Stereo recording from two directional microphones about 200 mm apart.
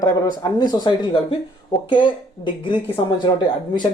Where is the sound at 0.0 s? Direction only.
20° left (ahead or behind).